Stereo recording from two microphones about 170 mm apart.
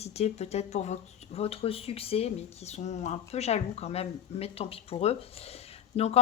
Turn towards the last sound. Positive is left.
turn(degrees=35)  # may be behind; listen again after turning